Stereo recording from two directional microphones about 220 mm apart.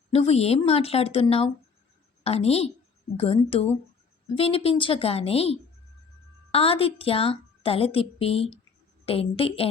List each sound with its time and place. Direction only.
0.1 s a woman's voice: 30° left (ahead or behind)